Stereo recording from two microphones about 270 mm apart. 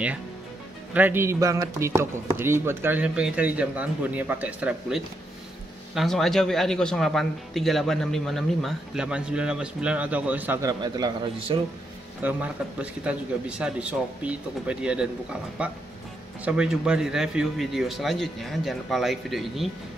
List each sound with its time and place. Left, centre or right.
0.9 s a man's voice: centre
12.2 s a man's voice: centre